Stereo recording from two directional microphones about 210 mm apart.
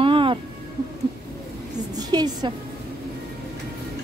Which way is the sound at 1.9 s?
20° right (ahead or behind).